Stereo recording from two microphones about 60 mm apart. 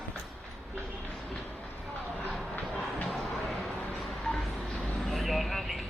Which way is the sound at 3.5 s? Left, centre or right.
Left.